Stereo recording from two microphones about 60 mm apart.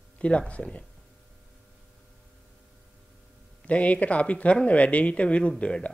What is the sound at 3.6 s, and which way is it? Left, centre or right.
Speech, left.